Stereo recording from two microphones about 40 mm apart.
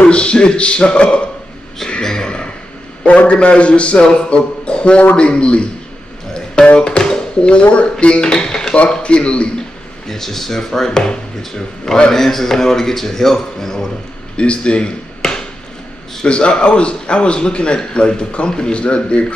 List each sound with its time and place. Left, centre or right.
0.0 s a man's voice: left
1.9 s a sound: centre
3.0 s a man's voice: left
6.8 s a sound: left
7.7 s a man's voice: left
8.7 s a man's voice: left
10.0 s speech: centre
14.3 s a sound: left
16.3 s a man's voice: left